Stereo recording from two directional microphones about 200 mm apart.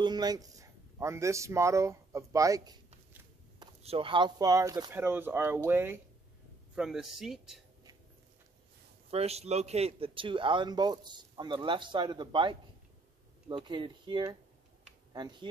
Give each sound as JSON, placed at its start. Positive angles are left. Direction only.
{"t": 0.0, "sound": "speech", "side_deg": -20}
{"t": 9.1, "sound": "a man's voice", "side_deg": -30}